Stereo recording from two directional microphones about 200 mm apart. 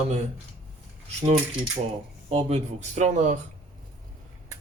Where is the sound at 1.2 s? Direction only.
35° right (ahead or behind).